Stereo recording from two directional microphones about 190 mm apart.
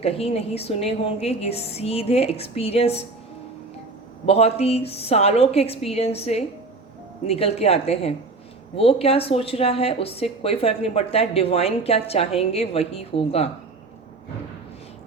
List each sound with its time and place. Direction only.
0.0 s speech: 30° left (ahead or behind)
4.3 s speech: 35° left (ahead or behind)